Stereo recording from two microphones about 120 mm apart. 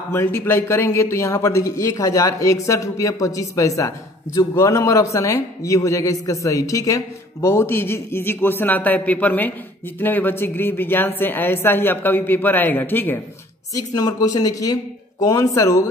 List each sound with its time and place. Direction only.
0.1 s a man's voice: 20° left (ahead or behind)
13.7 s a man's voice: 30° left (ahead or behind)